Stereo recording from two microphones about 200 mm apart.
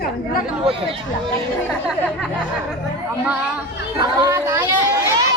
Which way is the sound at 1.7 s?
Centre (ahead or behind).